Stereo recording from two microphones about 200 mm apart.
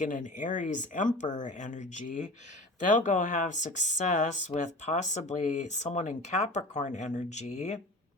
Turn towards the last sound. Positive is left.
turn(degrees=35)  # may be behind; listen again after turning